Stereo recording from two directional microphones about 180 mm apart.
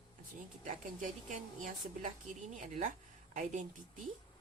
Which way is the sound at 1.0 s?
45° right (ahead or behind).